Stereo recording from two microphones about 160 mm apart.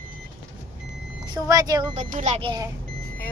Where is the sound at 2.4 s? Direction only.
25° right (ahead or behind).